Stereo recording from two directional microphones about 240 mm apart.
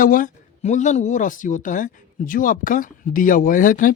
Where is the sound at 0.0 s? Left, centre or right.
Left.